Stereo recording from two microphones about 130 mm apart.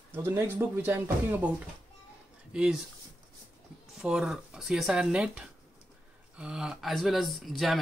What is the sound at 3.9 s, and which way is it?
Speech, 5° right (ahead or behind).